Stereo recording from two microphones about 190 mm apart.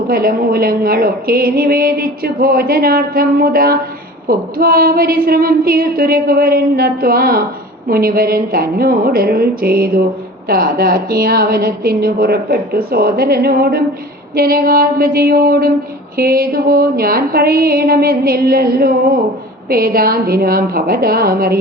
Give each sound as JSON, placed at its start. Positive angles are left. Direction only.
{"t": 0.1, "sound": "a woman's voice", "side_deg": -50}